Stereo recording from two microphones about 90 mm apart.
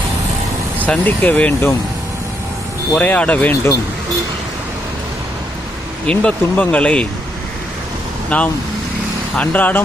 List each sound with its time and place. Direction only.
0.8 s speech: 20° left (ahead or behind)
2.9 s speech: 15° left (ahead or behind)
6.1 s speech: 10° left (ahead or behind)
8.3 s speech: 15° left (ahead or behind)